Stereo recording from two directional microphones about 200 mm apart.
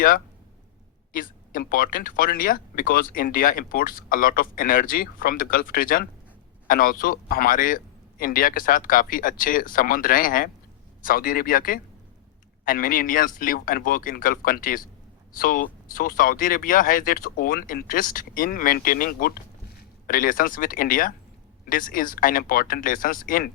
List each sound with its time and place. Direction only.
1.1 s speech: 45° left (ahead or behind)